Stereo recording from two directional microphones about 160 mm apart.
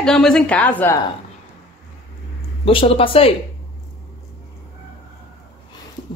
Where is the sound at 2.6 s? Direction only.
35° left (ahead or behind).